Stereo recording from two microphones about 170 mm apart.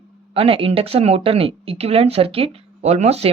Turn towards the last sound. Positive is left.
turn(degrees=-40)  # may be behind; listen again after turning